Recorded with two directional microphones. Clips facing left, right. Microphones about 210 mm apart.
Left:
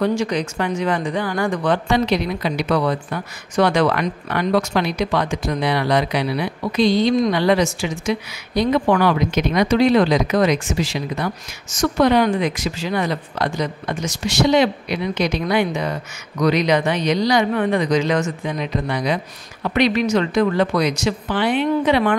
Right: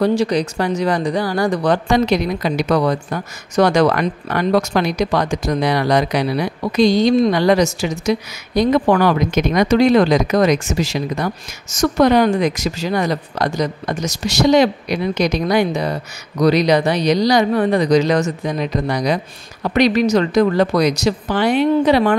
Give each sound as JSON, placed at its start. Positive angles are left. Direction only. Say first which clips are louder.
{"t": 0.0, "sound": "speech", "louder": "right 4 dB", "side_deg": -35}